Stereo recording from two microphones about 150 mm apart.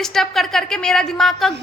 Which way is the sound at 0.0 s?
5° left (ahead or behind).